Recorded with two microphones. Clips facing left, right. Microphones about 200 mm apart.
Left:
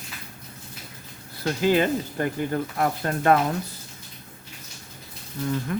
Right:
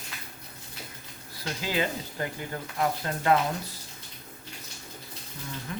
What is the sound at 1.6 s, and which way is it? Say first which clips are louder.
Speech: left 9 dB; 50° left (ahead or behind).